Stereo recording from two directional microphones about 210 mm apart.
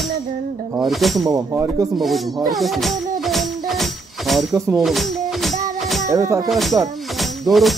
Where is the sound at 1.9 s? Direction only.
Centre (ahead or behind).